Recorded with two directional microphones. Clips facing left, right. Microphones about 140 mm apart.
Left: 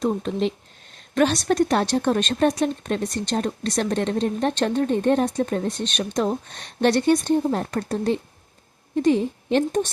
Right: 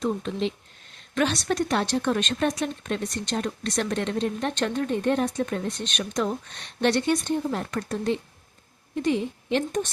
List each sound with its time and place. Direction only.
0.0 s a woman's voice: 40° left (ahead or behind)